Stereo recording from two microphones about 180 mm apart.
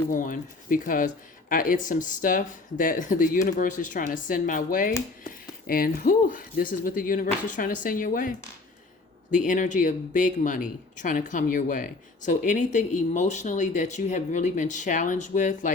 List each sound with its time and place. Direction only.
0.1 s speech: 50° left (ahead or behind)